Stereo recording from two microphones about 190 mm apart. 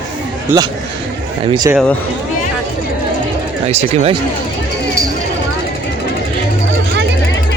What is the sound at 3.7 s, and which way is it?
Speech, 35° right (ahead or behind).